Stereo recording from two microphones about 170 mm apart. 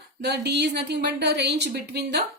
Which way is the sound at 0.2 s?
75° right (ahead or behind).